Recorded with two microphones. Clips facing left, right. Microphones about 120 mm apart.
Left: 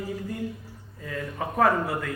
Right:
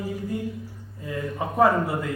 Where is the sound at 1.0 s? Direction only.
20° right (ahead or behind).